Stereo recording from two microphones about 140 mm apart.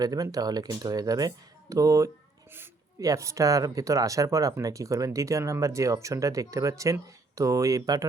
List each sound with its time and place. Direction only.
0.0 s speech: 25° right (ahead or behind)